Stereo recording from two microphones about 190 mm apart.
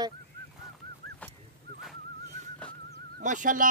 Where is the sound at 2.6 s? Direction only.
5° left (ahead or behind).